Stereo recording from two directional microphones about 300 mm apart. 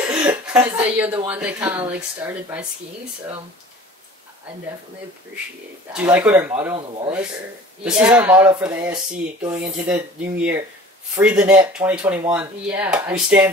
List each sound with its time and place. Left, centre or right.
0.3 s speech: centre
5.9 s speech: centre
6.8 s speech: centre
7.8 s speech: centre